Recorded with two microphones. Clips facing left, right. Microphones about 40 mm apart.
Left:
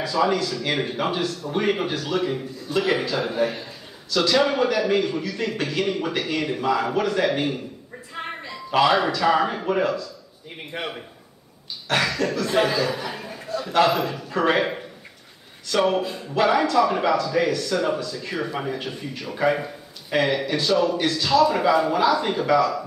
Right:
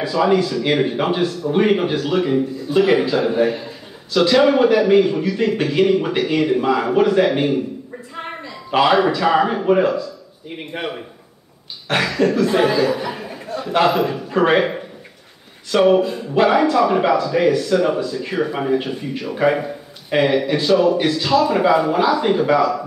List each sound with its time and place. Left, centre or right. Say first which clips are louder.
0.0 s speech: right 5 dB; centre
8.7 s speech: right 4 dB; centre
11.9 s a sound: right 5 dB; centre
12.4 s speech: right 5 dB; centre
15.7 s speech: right 7 dB; centre